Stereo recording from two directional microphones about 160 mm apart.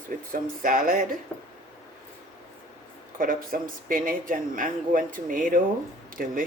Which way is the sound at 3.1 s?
60° right (ahead or behind).